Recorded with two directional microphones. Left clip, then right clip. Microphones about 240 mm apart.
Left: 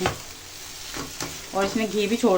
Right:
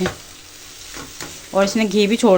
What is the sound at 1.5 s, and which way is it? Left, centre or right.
Speech, right.